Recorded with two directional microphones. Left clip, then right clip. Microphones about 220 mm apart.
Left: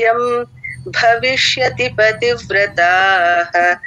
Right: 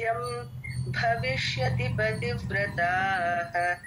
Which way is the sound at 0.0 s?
40° left (ahead or behind).